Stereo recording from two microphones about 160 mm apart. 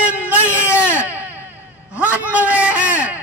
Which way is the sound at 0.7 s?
10° right (ahead or behind).